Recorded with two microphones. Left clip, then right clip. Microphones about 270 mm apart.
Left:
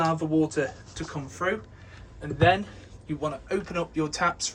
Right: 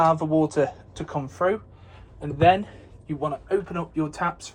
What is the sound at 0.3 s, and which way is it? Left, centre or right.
Speech, centre.